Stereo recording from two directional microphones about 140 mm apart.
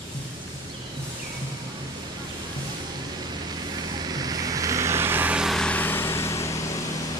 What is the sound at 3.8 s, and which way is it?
Vehicle, 30° right (ahead or behind).